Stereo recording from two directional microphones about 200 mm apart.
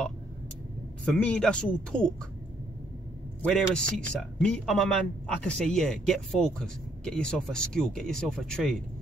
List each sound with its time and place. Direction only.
1.0 s speech: 5° left (ahead or behind)
3.4 s speech: 5° left (ahead or behind)